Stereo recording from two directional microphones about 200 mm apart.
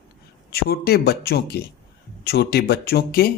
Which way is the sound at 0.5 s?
50° left (ahead or behind).